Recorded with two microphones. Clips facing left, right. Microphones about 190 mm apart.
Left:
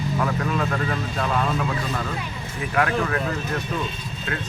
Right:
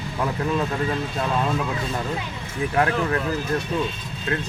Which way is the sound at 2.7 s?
30° right (ahead or behind).